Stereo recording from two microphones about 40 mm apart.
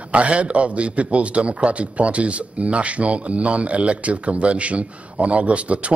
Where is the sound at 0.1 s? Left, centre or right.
Right.